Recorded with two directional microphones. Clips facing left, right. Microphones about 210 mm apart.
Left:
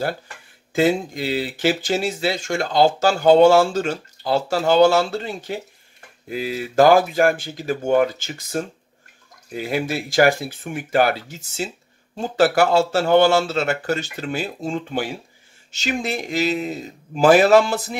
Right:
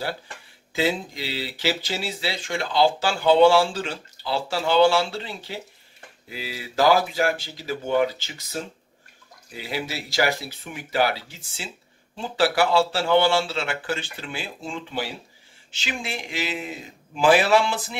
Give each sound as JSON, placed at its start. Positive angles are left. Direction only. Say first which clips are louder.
{"t": 0.7, "sound": "a man's voice", "louder": "left 6 dB", "side_deg": 50}